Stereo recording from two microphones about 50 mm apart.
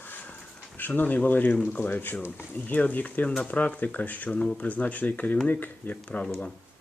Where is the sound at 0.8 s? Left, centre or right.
Left.